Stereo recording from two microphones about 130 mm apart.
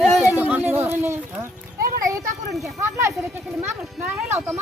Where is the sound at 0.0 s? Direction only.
Centre (ahead or behind).